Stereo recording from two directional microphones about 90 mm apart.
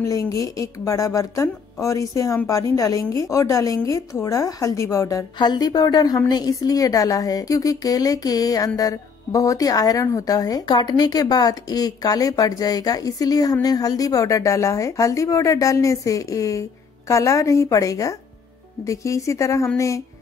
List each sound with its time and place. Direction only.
0.0 s a woman's voice: 35° left (ahead or behind)
10.8 s a woman's voice: 50° left (ahead or behind); by 19.7 s 35° left (ahead or behind)